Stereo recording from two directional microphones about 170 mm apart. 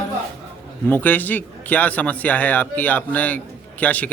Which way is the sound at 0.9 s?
10° left (ahead or behind).